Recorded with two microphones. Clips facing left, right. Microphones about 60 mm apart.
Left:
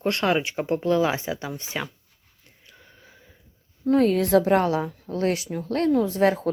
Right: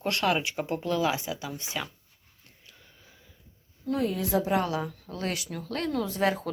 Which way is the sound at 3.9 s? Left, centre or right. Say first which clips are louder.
Left 9 dB; left.